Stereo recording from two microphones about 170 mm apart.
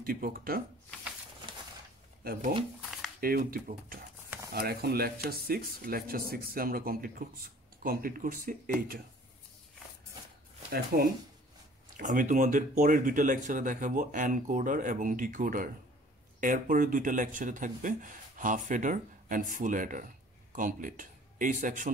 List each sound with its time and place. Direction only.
0.0 s speech: 60° right (ahead or behind)
2.2 s speech: 60° right (ahead or behind)
10.7 s speech: 60° right (ahead or behind)
12.0 s speech: 50° right (ahead or behind)